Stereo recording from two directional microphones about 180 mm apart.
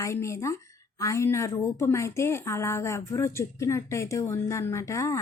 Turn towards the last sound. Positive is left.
turn(degrees=15)  # may be behind; listen again after turning